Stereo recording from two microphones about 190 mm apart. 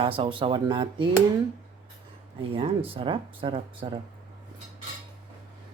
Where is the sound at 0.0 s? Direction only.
25° right (ahead or behind).